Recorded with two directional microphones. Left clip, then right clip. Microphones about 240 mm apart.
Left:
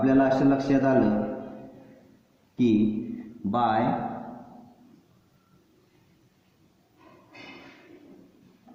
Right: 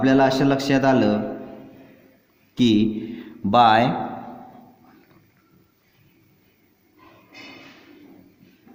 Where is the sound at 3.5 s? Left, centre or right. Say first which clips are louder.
Right 10 dB; right.